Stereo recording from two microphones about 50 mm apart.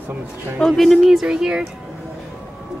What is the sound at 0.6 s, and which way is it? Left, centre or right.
Speech, centre.